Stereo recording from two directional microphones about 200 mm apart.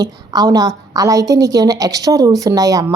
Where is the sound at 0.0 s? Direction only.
20° right (ahead or behind).